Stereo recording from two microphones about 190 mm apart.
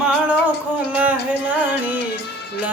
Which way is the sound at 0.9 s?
10° right (ahead or behind).